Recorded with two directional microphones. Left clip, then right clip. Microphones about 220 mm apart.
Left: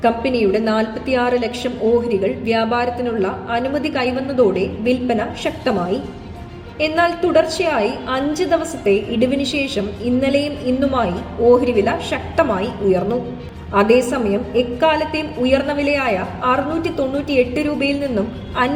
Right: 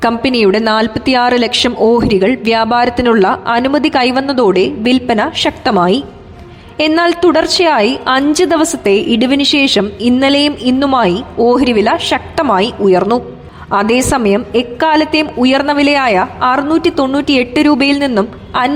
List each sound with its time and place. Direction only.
0.0 s a woman's voice: 50° right (ahead or behind)